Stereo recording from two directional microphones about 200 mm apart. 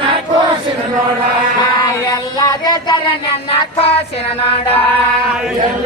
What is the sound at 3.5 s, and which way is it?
Child singing, 30° left (ahead or behind).